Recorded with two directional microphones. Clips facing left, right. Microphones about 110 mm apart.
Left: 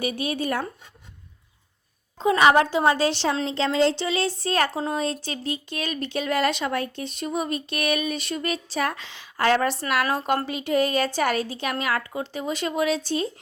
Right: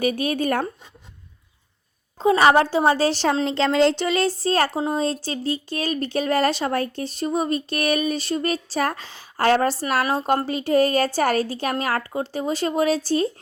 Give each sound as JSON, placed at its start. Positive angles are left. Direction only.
{"t": 0.0, "sound": "speech", "side_deg": -50}
{"t": 2.2, "sound": "speech", "side_deg": -35}
{"t": 3.4, "sound": "speech", "side_deg": -65}
{"t": 10.0, "sound": "a woman's voice", "side_deg": -20}
{"t": 10.2, "sound": "speech", "side_deg": -35}